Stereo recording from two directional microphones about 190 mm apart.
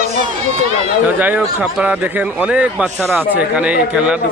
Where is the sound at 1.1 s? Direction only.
10° right (ahead or behind).